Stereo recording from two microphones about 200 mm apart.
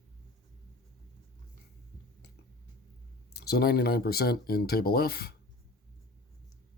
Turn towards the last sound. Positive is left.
turn(degrees=50)  # may be behind; listen again after turning